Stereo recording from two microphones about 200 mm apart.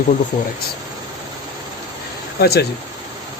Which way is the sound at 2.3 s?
50° left (ahead or behind).